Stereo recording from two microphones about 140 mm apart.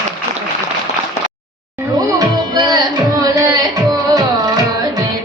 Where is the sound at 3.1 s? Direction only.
25° right (ahead or behind).